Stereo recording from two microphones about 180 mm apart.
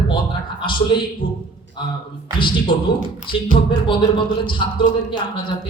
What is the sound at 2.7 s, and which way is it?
Speech, 30° left (ahead or behind).